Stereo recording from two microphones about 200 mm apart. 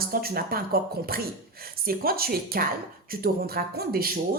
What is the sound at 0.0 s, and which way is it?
Speech, 50° right (ahead or behind).